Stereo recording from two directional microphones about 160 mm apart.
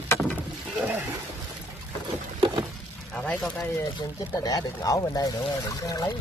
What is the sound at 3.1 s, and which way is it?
Speech, 5° left (ahead or behind).